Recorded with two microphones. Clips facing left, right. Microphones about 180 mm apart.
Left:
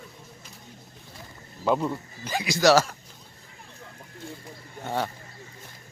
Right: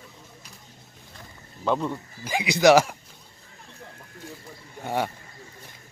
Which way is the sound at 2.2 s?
15° right (ahead or behind).